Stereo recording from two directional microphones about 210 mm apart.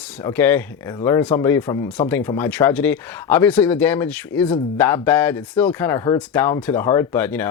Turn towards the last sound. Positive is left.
turn(degrees=10)  # may be behind; listen again after turning